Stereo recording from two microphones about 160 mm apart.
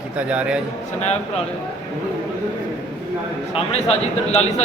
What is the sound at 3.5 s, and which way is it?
A man's voice, 40° left (ahead or behind).